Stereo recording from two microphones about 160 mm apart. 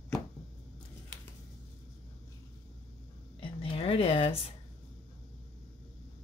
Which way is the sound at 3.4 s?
35° left (ahead or behind).